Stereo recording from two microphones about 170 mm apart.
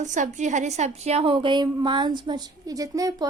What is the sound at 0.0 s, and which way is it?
A woman's voice, 45° right (ahead or behind).